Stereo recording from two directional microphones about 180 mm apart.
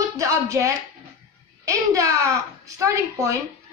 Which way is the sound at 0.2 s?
15° right (ahead or behind).